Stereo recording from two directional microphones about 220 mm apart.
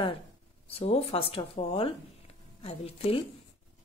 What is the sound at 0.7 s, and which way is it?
A woman's voice, 25° left (ahead or behind).